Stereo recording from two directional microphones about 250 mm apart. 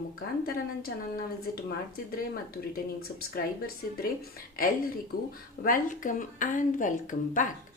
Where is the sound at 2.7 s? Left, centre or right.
Left.